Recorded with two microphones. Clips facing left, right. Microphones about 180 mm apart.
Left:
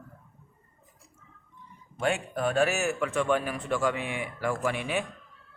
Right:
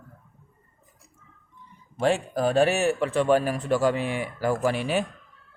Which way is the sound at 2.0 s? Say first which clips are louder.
Right 5 dB; 35° right (ahead or behind).